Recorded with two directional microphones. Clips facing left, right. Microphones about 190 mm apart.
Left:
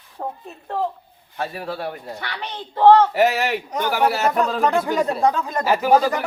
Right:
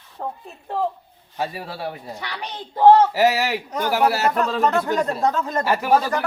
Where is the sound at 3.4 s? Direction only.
5° right (ahead or behind); by 5.6 s 10° left (ahead or behind).